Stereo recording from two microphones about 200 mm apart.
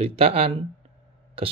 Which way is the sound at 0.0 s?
30° right (ahead or behind).